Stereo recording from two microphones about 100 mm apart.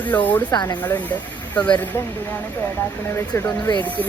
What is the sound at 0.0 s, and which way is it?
Speech, 15° left (ahead or behind).